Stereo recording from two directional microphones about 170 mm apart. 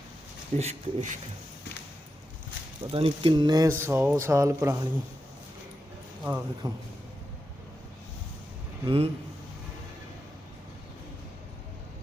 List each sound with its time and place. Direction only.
0.6 s speech: 40° right (ahead or behind)
2.9 s speech: 35° right (ahead or behind); by 4.8 s 15° right (ahead or behind)
6.2 s speech: 15° right (ahead or behind)
8.8 s a man's voice: 30° right (ahead or behind)